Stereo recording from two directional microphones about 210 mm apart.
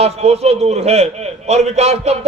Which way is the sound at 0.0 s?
30° right (ahead or behind).